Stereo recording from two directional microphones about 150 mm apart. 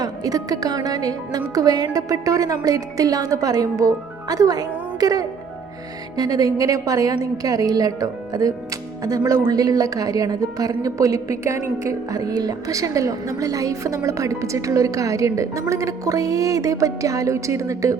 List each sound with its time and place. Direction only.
0.0 s a woman's voice: 25° right (ahead or behind)